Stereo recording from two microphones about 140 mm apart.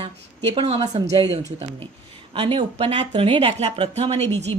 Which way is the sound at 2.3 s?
40° right (ahead or behind).